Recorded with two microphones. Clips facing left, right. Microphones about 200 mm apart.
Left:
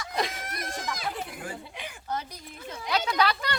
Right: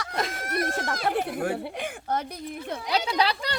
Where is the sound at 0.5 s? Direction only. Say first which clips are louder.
Right 7 dB; 60° right (ahead or behind).